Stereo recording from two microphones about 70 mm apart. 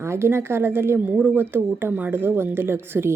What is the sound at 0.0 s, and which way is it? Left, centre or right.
Speech, right.